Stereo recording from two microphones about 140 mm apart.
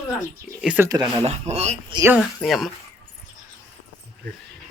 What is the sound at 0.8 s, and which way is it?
Speech, 25° right (ahead or behind).